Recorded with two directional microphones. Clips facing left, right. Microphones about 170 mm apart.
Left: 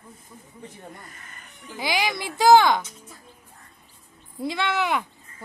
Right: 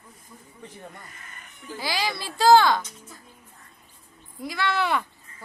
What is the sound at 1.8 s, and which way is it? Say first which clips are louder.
Speech: left 3 dB; 15° left (ahead or behind).